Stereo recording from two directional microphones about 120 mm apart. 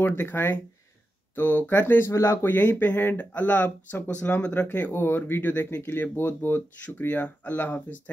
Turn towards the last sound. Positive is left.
turn(degrees=15)  # may be behind; listen again after turning